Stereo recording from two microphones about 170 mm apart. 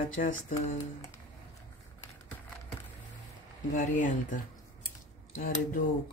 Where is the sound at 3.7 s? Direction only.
50° left (ahead or behind).